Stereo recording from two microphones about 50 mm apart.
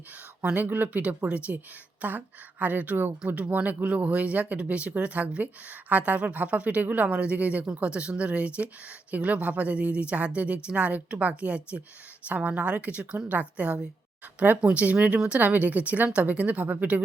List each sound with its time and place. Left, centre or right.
0.5 s speech: right